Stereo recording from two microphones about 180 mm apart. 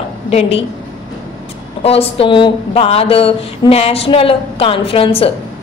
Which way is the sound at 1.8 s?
35° left (ahead or behind).